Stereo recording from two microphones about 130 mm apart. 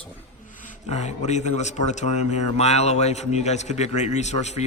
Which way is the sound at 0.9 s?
60° left (ahead or behind).